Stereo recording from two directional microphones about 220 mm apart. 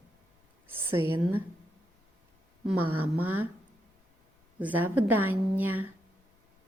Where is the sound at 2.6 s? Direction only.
5° right (ahead or behind).